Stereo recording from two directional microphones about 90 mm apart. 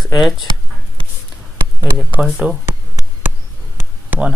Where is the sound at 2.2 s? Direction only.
10° right (ahead or behind).